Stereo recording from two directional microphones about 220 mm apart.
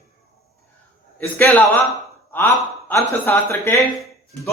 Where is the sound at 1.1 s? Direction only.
5° left (ahead or behind).